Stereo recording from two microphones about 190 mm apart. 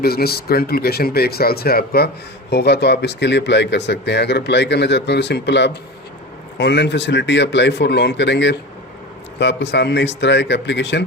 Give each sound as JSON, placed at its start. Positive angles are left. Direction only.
{"t": 0.0, "sound": "speech", "side_deg": 55}